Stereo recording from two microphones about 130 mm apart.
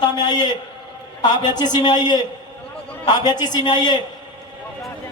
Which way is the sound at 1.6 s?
35° left (ahead or behind).